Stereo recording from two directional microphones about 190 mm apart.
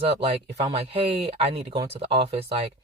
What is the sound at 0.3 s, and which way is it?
Speech, 35° right (ahead or behind).